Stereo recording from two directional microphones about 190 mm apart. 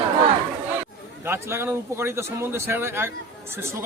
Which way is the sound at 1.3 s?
15° right (ahead or behind).